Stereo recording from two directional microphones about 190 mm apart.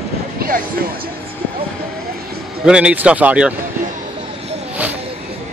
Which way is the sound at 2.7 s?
5° right (ahead or behind).